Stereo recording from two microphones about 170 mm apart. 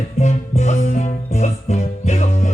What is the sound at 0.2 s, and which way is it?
Music, 45° left (ahead or behind).